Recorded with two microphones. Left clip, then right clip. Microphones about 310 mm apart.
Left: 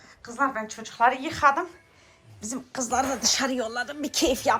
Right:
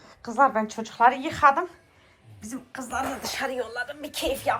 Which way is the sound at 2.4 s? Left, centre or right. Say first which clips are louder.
Left 5 dB; centre.